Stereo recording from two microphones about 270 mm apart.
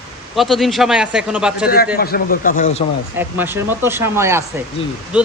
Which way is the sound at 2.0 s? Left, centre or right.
Left.